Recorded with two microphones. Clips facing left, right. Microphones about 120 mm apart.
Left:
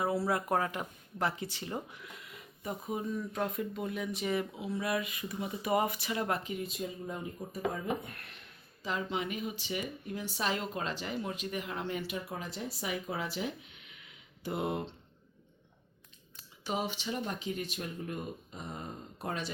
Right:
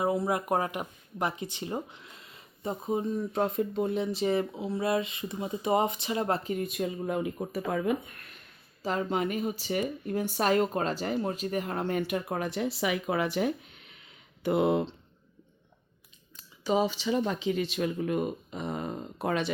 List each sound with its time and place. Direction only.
0.0 s speech: 20° right (ahead or behind)
6.5 s speech: 55° right (ahead or behind); by 7.9 s 80° right
8.4 s speech: 45° right (ahead or behind)
14.4 s speech: 85° right
16.8 s speech: 90° right